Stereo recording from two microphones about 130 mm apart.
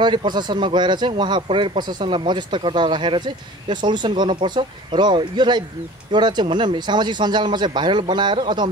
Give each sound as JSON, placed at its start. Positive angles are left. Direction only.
{"t": 0.0, "sound": "speech", "side_deg": -35}